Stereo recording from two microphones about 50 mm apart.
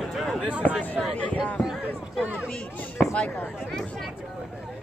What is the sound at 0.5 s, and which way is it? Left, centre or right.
Speech, right.